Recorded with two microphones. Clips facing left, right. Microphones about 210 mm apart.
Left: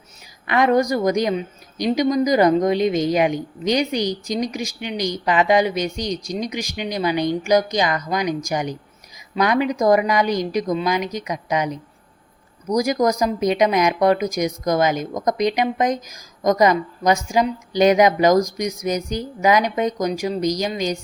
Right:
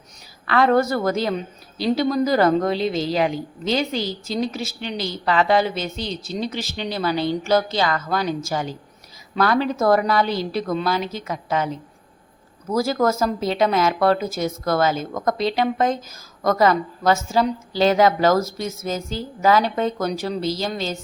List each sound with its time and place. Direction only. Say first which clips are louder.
0.4 s speech: even; 15° left (ahead or behind)